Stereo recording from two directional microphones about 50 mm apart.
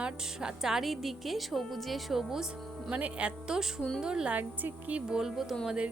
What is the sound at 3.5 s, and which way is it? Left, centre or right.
Speech, centre.